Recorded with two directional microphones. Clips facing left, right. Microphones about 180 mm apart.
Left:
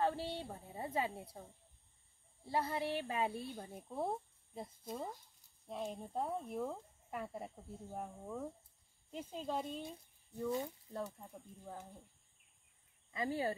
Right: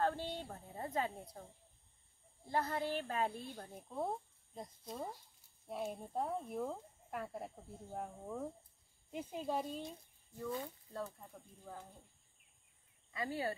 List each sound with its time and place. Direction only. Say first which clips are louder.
0.0 s a woman's voice: even; 5° left (ahead or behind)
2.4 s a woman's voice: even; 5° left (ahead or behind)
5.7 s speech: right 1 dB; 5° right (ahead or behind)
10.3 s speech: left 4 dB; 20° left (ahead or behind)
13.1 s speech: left 2 dB; 20° left (ahead or behind)